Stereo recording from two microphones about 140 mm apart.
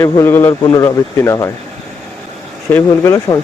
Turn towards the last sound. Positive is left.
turn(degrees=20)  # may be behind; listen again after turning